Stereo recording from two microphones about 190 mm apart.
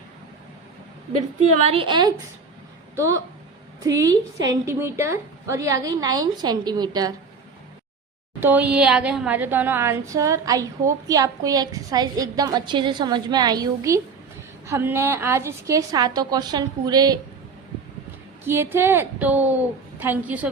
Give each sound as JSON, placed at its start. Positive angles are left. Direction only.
{"t": 1.5, "sound": "a woman's voice", "side_deg": -30}
{"t": 8.4, "sound": "a woman's voice", "side_deg": -10}
{"t": 18.4, "sound": "a woman's voice", "side_deg": -10}